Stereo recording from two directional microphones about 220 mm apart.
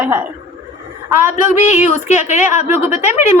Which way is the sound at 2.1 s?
30° left (ahead or behind).